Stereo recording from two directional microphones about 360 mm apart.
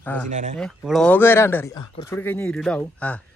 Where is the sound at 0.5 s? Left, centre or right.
Centre.